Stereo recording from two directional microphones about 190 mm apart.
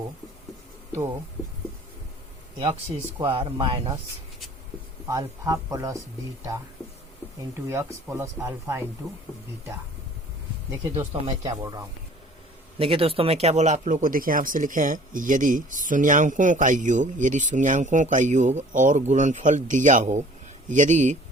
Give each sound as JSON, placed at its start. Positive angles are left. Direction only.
{"t": 3.2, "sound": "speech", "side_deg": -25}
{"t": 5.0, "sound": "speech", "side_deg": -15}
{"t": 7.3, "sound": "speech", "side_deg": -15}
{"t": 9.0, "sound": "speech", "side_deg": 0}
{"t": 11.0, "sound": "speech", "side_deg": -30}
{"t": 11.4, "sound": "speech", "side_deg": -20}
{"t": 12.8, "sound": "speech", "side_deg": -30}